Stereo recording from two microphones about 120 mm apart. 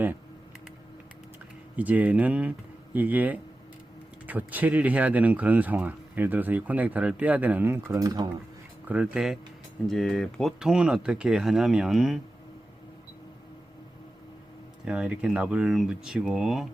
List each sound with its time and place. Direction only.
1.7 s speech: 15° right (ahead or behind)
7.9 s speech: 30° right (ahead or behind)
8.9 s speech: 10° right (ahead or behind)
14.8 s speech: 5° right (ahead or behind)